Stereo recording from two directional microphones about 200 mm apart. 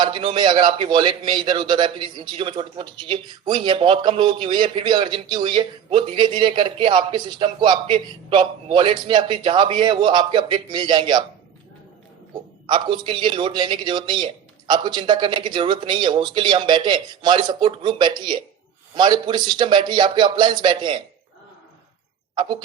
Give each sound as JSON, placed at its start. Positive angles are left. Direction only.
{"t": 0.0, "sound": "a man's voice", "side_deg": -25}
{"t": 12.6, "sound": "a man's voice", "side_deg": -25}